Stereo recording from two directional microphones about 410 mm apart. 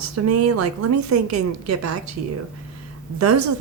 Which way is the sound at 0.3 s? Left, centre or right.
Right.